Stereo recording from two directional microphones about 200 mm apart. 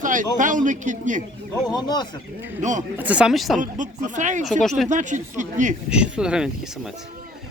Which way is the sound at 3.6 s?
40° right (ahead or behind).